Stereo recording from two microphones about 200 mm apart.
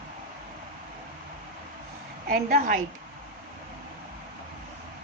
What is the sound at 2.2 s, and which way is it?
Speech, 45° right (ahead or behind).